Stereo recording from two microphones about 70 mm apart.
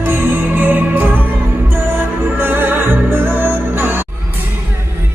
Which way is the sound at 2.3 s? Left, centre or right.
Right.